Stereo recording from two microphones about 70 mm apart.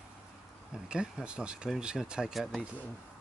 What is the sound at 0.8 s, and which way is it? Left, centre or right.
Speech, centre.